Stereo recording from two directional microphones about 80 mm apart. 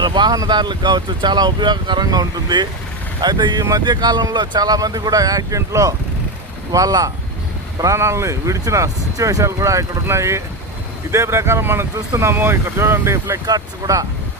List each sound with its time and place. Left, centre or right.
0.0 s speech: right
0.3 s speech: right
3.6 s speech: right
3.8 s speech: right
13.4 s speech: right